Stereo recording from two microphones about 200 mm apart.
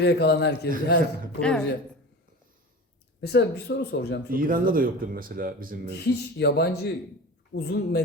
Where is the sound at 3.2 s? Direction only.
60° left (ahead or behind).